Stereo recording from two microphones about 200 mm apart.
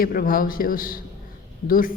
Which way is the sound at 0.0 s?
45° left (ahead or behind).